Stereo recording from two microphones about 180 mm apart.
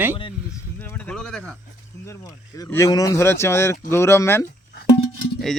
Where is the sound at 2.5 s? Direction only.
15° left (ahead or behind).